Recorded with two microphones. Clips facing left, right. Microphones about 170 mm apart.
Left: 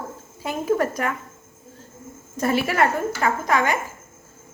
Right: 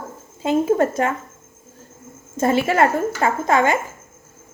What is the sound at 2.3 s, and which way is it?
A woman's voice, 25° right (ahead or behind).